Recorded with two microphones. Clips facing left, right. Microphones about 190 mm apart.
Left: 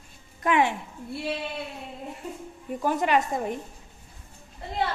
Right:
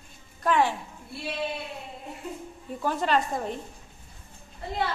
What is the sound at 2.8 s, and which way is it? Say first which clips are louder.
Speech: left 2 dB; 15° left (ahead or behind).